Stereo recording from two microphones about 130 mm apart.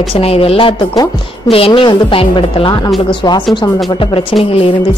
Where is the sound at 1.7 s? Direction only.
40° left (ahead or behind).